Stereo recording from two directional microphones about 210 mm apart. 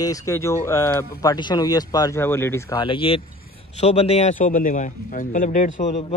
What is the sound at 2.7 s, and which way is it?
A man's voice, 25° left (ahead or behind).